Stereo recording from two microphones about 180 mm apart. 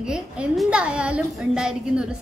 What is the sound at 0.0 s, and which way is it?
Speech, 5° right (ahead or behind).